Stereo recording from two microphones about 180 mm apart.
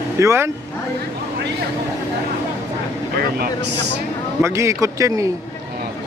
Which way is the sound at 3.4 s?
70° right (ahead or behind).